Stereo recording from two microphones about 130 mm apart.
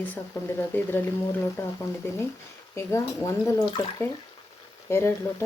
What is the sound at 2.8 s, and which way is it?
Speech, 20° left (ahead or behind).